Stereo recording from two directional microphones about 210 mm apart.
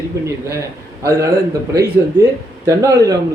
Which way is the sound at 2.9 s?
15° right (ahead or behind).